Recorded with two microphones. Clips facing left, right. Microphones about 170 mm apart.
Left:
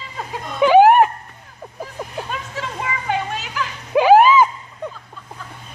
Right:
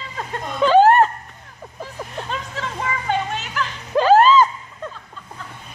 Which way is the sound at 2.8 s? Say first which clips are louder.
Right 1 dB; 10° left (ahead or behind).